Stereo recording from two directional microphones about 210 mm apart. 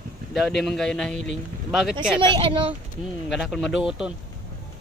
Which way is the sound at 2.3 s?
25° right (ahead or behind).